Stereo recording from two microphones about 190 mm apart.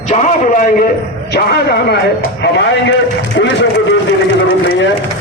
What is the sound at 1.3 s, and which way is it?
Speech, 55° left (ahead or behind).